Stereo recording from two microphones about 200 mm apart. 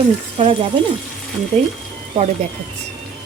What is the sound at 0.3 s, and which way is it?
Speech, 30° right (ahead or behind).